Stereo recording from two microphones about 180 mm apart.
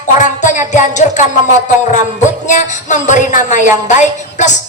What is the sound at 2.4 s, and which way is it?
A man's voice, 45° left (ahead or behind).